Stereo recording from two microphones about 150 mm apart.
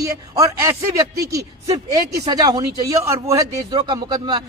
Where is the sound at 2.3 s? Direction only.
25° right (ahead or behind).